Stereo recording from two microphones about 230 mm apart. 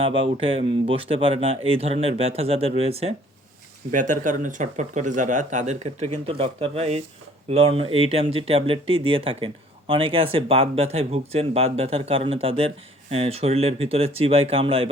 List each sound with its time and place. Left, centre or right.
0.3 s speech: right